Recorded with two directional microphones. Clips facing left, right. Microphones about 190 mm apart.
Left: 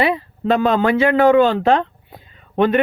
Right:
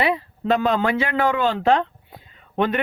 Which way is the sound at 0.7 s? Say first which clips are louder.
Left 6 dB; 55° left (ahead or behind).